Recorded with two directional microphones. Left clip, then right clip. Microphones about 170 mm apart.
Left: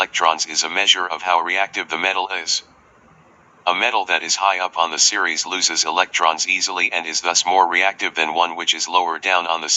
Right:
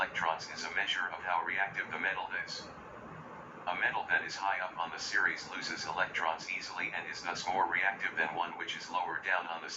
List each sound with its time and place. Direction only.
0.0 s speech: 50° left (ahead or behind)
3.6 s speech: 55° left (ahead or behind)